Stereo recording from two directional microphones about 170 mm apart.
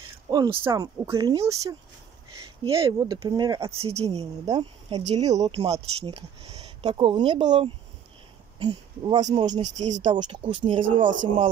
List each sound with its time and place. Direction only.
0.3 s speech: 20° right (ahead or behind)
3.8 s speech: 35° right (ahead or behind)
9.6 s speech: 45° right (ahead or behind)
10.0 s speech: 25° right (ahead or behind)